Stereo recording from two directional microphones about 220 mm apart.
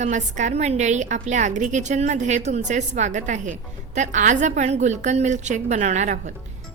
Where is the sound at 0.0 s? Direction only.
35° right (ahead or behind).